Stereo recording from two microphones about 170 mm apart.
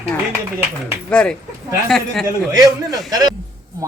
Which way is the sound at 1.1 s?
5° left (ahead or behind).